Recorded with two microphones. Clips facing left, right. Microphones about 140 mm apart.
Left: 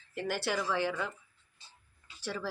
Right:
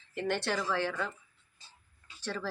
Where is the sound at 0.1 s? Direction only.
5° left (ahead or behind).